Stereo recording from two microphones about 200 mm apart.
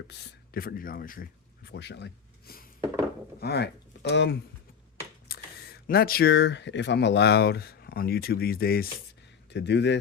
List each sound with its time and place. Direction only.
0.1 s speech: 50° left (ahead or behind)
5.3 s a sound: 50° left (ahead or behind)
5.9 s speech: 50° left (ahead or behind)
9.5 s speech: 60° left (ahead or behind)